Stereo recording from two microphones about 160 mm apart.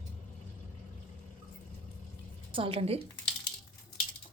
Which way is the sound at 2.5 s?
35° right (ahead or behind).